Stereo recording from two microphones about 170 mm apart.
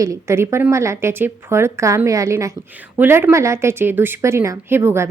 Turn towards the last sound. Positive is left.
turn(degrees=-15)  # may be behind; listen again after turning